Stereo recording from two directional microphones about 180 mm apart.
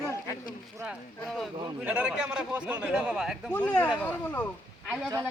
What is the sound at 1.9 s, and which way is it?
A man's voice, 5° right (ahead or behind).